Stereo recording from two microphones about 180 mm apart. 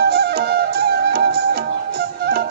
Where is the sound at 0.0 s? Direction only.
65° right (ahead or behind).